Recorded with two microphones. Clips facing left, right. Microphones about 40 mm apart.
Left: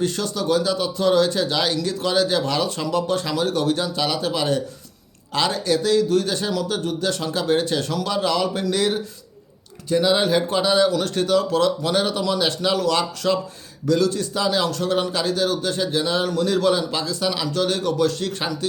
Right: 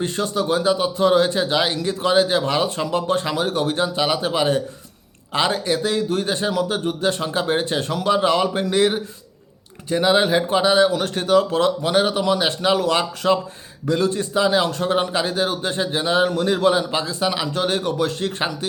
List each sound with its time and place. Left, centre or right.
0.0 s a man's voice: right